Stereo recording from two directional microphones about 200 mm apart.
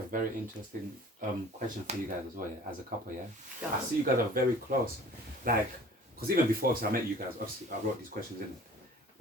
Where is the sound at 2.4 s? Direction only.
45° right (ahead or behind).